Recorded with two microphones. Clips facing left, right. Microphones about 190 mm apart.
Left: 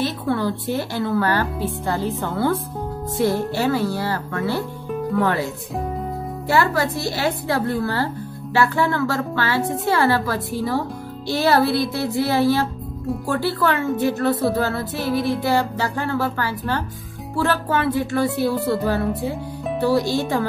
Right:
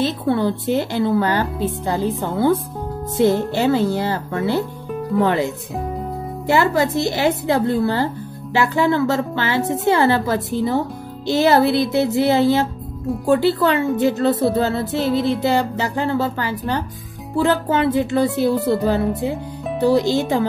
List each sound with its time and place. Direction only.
0.0 s speech: 20° right (ahead or behind)
19.8 s speech: 20° right (ahead or behind)